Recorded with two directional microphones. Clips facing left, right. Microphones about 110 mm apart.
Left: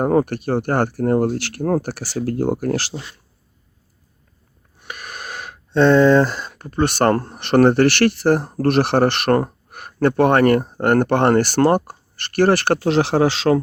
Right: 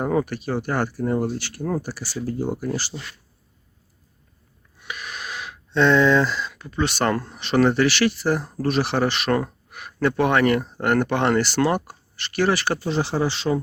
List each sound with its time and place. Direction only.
0.0 s speech: 50° left (ahead or behind); by 2.9 s 75° left (ahead or behind)
4.8 s speech: 45° left (ahead or behind)
9.4 s speech: 45° left (ahead or behind); by 13.6 s 90° left